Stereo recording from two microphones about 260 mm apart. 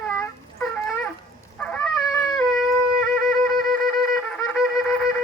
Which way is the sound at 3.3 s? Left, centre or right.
Centre.